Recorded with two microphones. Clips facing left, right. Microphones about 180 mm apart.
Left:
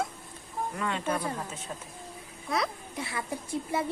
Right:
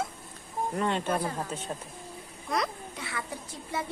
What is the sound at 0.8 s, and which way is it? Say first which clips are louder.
Speech: right 3 dB; 30° right (ahead or behind).